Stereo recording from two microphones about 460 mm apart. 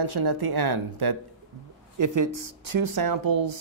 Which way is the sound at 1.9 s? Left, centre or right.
Right.